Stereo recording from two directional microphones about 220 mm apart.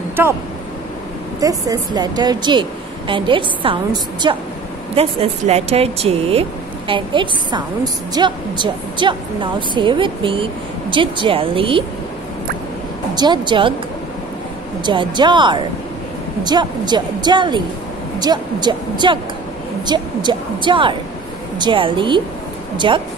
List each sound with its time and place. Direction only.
1.4 s a woman's voice: 15° right (ahead or behind)
13.1 s a woman's voice: 20° right (ahead or behind)
14.9 s a woman's voice: 20° right (ahead or behind)